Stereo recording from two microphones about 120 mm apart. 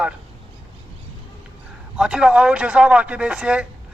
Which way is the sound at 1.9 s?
5° right (ahead or behind).